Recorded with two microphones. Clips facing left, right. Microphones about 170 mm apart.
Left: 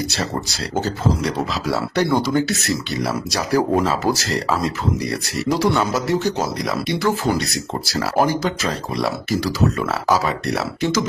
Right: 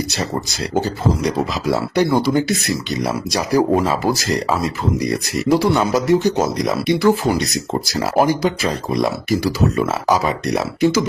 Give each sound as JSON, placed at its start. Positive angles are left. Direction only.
{"t": 0.7, "sound": "speech", "side_deg": -15}